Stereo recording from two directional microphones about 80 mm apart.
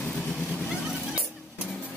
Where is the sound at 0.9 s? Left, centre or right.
Centre.